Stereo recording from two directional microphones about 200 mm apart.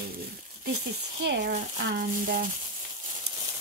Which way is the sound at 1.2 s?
60° right (ahead or behind).